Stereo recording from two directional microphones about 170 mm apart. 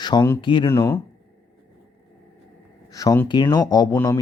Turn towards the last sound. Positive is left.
turn(degrees=15)  # may be behind; listen again after turning